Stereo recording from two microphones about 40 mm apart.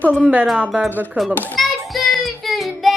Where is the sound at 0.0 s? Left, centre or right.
Left.